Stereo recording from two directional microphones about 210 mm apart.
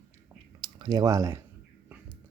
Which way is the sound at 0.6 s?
20° right (ahead or behind).